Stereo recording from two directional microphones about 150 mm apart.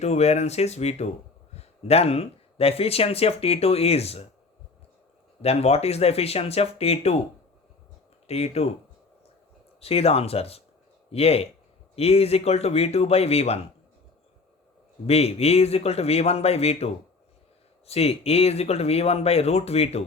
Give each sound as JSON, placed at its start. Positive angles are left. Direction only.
{"t": 0.0, "sound": "speech", "side_deg": 45}
{"t": 5.4, "sound": "speech", "side_deg": 45}
{"t": 8.3, "sound": "speech", "side_deg": 45}
{"t": 9.8, "sound": "speech", "side_deg": 40}
{"t": 15.0, "sound": "speech", "side_deg": 45}